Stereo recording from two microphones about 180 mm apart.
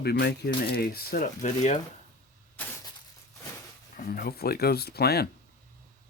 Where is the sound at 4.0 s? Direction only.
55° left (ahead or behind).